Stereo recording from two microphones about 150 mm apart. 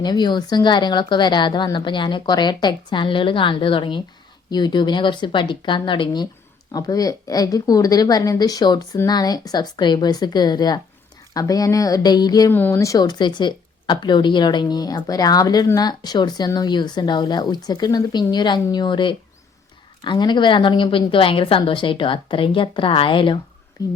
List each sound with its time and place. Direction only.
0.0 s a woman's voice: 30° left (ahead or behind)
12.5 s a woman's voice: 15° left (ahead or behind)